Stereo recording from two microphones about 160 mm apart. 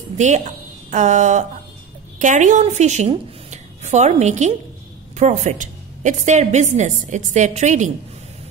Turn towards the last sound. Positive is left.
turn(degrees=-50)  # may be behind; listen again after turning